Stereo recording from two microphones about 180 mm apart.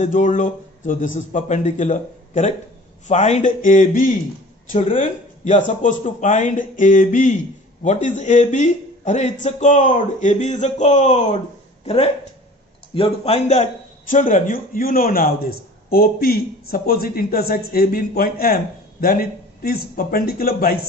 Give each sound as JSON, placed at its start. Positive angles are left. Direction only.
{"t": 0.0, "sound": "a man's voice", "side_deg": 45}